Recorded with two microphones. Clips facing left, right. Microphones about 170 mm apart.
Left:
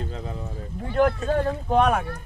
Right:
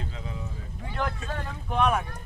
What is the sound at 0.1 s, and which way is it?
Speech, 45° left (ahead or behind).